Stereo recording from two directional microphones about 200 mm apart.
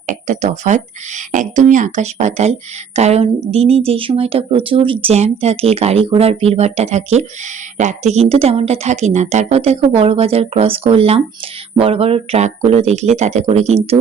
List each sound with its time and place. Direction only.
0.1 s speech: 35° right (ahead or behind)